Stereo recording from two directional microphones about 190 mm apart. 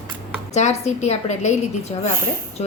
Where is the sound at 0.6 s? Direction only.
35° left (ahead or behind).